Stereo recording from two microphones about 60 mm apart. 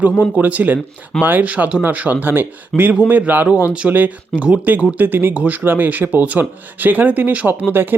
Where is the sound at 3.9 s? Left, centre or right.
Right.